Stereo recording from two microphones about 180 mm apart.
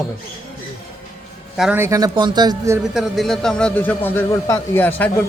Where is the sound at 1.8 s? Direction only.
20° right (ahead or behind).